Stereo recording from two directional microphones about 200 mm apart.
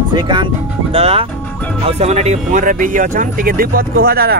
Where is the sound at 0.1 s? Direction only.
20° right (ahead or behind); by 4.4 s 50° right (ahead or behind).